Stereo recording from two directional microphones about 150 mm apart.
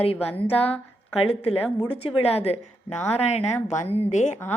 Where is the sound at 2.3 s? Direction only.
45° left (ahead or behind).